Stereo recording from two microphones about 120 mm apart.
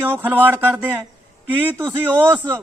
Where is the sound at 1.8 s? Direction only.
35° right (ahead or behind).